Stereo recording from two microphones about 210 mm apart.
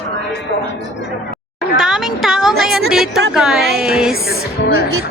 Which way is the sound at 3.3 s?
Centre (ahead or behind).